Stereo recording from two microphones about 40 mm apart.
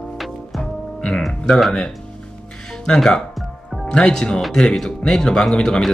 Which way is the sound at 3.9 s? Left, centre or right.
Left.